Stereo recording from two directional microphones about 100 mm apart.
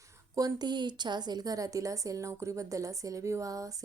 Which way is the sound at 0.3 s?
40° right (ahead or behind).